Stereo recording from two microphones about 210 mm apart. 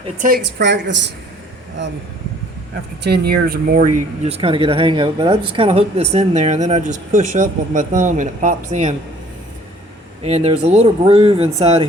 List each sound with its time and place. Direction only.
0.2 s a woman's voice: 45° right (ahead or behind)
3.0 s speech: 50° right (ahead or behind)
4.3 s speech: 25° right (ahead or behind)
10.2 s speech: 30° right (ahead or behind)